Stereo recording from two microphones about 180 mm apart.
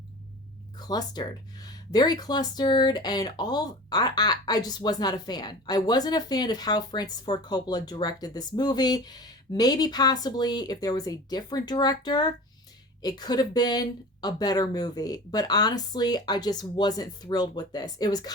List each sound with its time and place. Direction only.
0.8 s speech: 20° left (ahead or behind)